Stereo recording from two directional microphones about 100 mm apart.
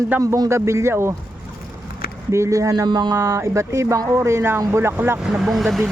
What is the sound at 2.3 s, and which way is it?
Speech, 30° right (ahead or behind).